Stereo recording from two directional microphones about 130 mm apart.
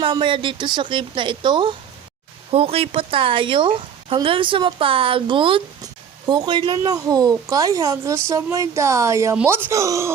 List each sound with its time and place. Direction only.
0.0 s a woman's voice: 40° right (ahead or behind)
2.5 s a woman's voice: 50° right (ahead or behind); by 10.1 s 25° right (ahead or behind)